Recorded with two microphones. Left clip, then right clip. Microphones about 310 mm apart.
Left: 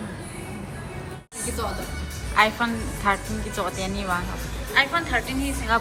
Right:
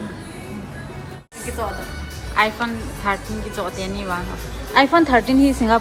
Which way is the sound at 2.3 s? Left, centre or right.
Centre.